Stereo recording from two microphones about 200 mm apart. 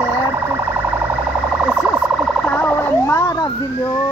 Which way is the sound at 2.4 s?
5° left (ahead or behind).